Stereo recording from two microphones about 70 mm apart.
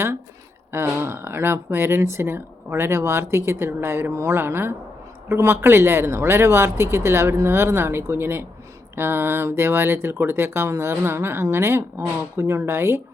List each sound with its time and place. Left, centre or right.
0.7 s speech: right